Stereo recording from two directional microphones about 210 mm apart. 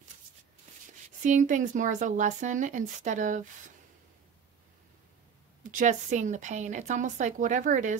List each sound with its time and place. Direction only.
1.2 s speech: 35° right (ahead or behind)
5.6 s speech: 40° right (ahead or behind)